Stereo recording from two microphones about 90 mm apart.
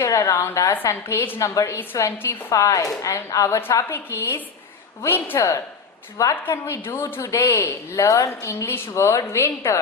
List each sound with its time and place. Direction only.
0.0 s a woman's voice: 35° left (ahead or behind)